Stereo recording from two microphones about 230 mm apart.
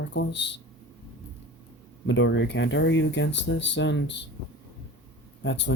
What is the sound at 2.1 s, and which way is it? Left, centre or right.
Speech, left.